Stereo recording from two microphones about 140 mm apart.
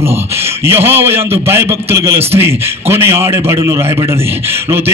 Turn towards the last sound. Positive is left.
turn(degrees=-20)  # may be behind; listen again after turning